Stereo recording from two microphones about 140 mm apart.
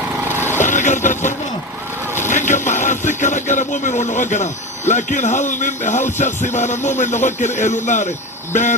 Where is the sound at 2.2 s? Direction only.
60° left (ahead or behind).